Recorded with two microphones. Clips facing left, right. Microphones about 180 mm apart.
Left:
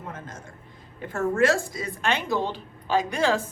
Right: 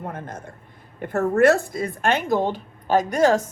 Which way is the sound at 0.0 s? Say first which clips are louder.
Right 6 dB; 60° right (ahead or behind).